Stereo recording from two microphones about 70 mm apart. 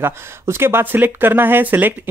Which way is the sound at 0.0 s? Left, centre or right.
Right.